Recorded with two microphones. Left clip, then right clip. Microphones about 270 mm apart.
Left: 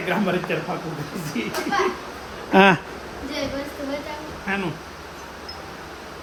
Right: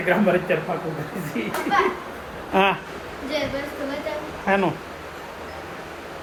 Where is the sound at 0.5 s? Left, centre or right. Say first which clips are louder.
Right 3 dB; centre.